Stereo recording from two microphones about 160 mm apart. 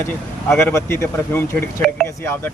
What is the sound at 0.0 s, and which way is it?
Speech, 15° left (ahead or behind).